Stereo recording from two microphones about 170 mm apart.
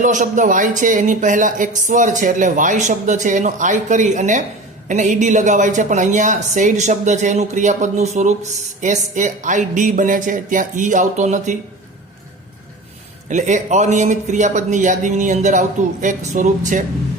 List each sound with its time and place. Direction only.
0.0 s speech: 45° right (ahead or behind)
13.3 s speech: 45° right (ahead or behind)